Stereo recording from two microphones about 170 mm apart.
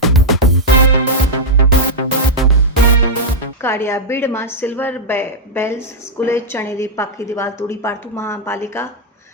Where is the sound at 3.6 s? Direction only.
15° left (ahead or behind).